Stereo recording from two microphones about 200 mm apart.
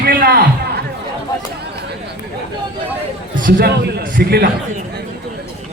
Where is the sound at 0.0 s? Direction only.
50° right (ahead or behind).